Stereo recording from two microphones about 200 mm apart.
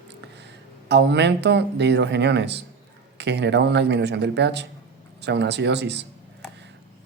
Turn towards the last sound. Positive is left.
turn(degrees=-60)  # may be behind; listen again after turning